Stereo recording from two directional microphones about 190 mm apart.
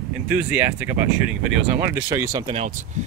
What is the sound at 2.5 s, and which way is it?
Speech, 40° right (ahead or behind).